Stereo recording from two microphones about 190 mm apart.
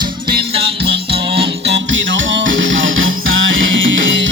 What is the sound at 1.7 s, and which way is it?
Music, 70° right (ahead or behind).